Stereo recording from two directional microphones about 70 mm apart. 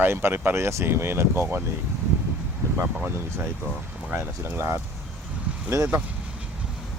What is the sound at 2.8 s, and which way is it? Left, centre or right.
Speech, right.